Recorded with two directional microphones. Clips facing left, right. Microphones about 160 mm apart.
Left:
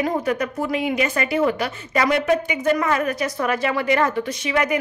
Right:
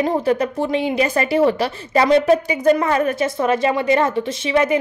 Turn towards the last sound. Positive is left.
turn(degrees=-25)  # may be behind; listen again after turning